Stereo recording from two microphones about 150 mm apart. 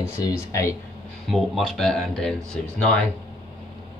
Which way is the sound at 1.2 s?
Centre (ahead or behind).